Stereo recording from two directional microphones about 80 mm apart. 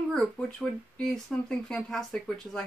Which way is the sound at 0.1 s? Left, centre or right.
Centre.